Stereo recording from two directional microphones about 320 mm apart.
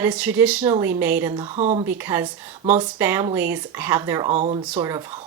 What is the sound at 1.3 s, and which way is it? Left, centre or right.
Speech, centre.